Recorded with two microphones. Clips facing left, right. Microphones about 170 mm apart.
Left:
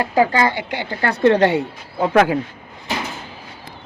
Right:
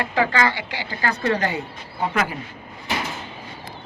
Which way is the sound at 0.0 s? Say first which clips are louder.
Left 5 dB; 40° left (ahead or behind).